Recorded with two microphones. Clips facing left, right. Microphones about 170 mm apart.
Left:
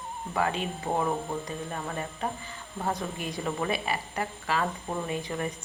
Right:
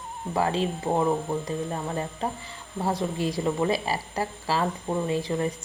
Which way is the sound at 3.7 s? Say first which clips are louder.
Right 3 dB; 35° right (ahead or behind).